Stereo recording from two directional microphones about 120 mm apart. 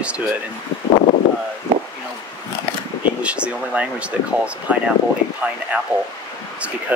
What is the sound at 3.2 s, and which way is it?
Speech, 10° right (ahead or behind).